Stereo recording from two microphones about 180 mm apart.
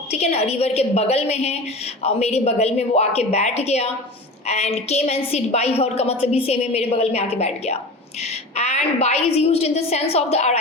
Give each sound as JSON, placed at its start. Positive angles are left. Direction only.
{"t": 0.1, "sound": "a woman's voice", "side_deg": 35}